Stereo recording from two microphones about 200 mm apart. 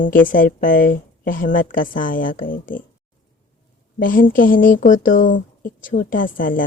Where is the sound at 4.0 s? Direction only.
45° left (ahead or behind).